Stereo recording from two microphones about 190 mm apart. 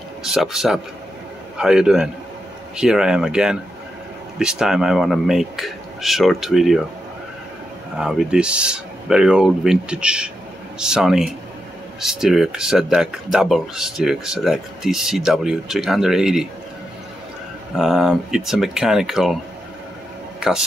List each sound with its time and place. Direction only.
0.2 s speech: centre (ahead or behind)
7.9 s speech: 5° right (ahead or behind)
17.7 s speech: centre (ahead or behind)
20.3 s music: 5° right (ahead or behind)